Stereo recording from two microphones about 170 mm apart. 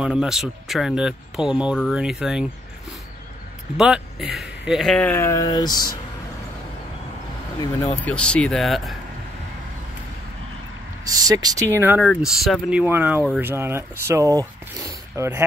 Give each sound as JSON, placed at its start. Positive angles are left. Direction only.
{"t": 0.0, "sound": "speech", "side_deg": -5}
{"t": 3.7, "sound": "speech", "side_deg": -5}
{"t": 8.0, "sound": "speech", "side_deg": 5}
{"t": 11.1, "sound": "speech", "side_deg": -20}
{"t": 12.0, "sound": "speech", "side_deg": 0}